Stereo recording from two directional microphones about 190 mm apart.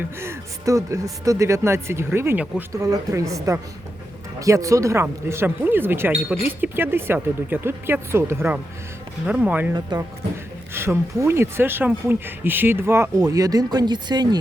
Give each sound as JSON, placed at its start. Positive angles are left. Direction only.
{"t": 0.2, "sound": "speech", "side_deg": -15}
{"t": 10.8, "sound": "speech", "side_deg": -15}